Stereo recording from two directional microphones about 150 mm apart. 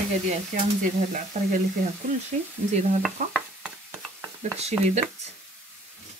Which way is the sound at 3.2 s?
60° right (ahead or behind).